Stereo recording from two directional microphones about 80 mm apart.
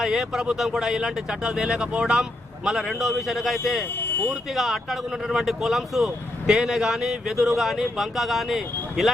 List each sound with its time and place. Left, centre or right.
0.0 s speech: centre
3.9 s a sound: left
4.3 s speech: centre